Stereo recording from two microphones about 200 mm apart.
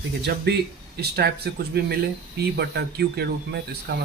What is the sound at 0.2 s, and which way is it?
Speech, 55° right (ahead or behind).